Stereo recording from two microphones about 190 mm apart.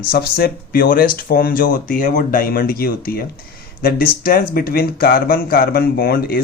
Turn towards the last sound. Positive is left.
turn(degrees=50)  # may be behind; listen again after turning